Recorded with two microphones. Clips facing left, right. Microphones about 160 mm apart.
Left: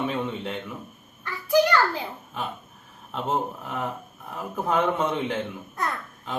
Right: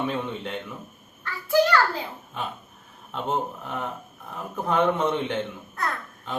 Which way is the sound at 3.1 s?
Centre (ahead or behind).